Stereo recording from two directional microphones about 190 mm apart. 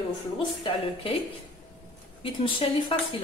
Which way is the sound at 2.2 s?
25° left (ahead or behind).